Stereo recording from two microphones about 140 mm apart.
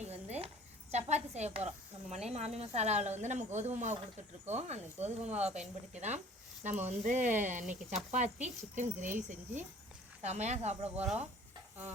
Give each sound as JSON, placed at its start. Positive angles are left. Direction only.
{"t": 0.0, "sound": "a woman's voice", "side_deg": -50}
{"t": 10.2, "sound": "speech", "side_deg": -55}
{"t": 10.8, "sound": "speech", "side_deg": -5}